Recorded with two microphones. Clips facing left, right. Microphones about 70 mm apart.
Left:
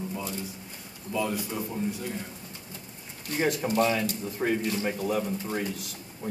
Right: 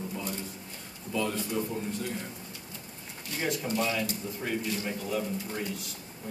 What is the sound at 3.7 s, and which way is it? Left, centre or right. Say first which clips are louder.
Speech: left 5 dB; left.